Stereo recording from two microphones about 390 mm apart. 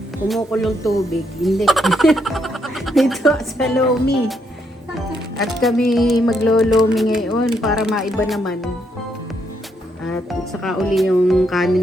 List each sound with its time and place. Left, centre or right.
0.3 s speech: centre
5.4 s speech: centre
10.0 s speech: centre